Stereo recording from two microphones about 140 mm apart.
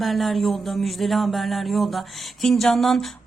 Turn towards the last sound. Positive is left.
turn(degrees=0)  # may be behind; listen again after turning